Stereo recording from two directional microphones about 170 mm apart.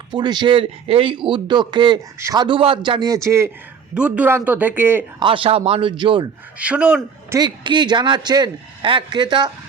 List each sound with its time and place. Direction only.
0.1 s a man's voice: 25° right (ahead or behind)
5.2 s speech: 30° right (ahead or behind)
6.6 s speech: 5° right (ahead or behind)
7.3 s a man's voice: 25° right (ahead or behind)